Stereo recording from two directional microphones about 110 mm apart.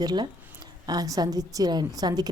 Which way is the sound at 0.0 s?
40° right (ahead or behind).